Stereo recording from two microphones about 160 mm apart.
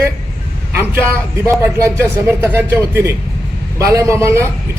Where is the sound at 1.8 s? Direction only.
15° right (ahead or behind).